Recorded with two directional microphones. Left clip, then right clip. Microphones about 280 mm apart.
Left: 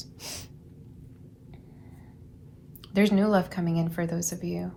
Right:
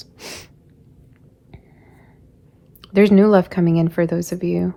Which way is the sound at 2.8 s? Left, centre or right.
Right.